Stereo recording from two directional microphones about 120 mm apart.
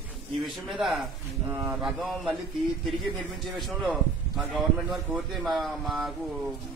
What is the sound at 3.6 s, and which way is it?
A man's voice, centre (ahead or behind).